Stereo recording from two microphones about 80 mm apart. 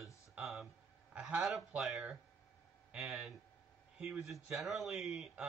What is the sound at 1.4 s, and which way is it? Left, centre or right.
Speech, centre.